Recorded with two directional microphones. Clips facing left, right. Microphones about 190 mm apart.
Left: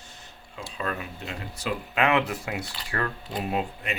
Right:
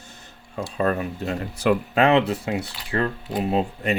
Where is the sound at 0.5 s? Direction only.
40° right (ahead or behind).